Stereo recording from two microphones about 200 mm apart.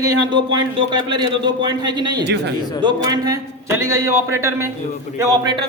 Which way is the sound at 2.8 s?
20° right (ahead or behind).